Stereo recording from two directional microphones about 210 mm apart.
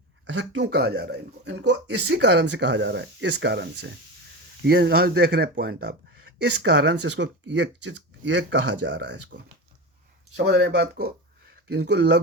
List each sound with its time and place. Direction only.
0.3 s speech: 60° right (ahead or behind)